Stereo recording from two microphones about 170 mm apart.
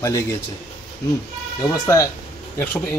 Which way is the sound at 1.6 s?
20° left (ahead or behind).